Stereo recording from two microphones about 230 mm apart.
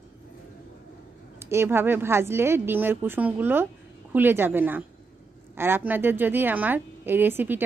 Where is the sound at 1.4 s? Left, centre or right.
Centre.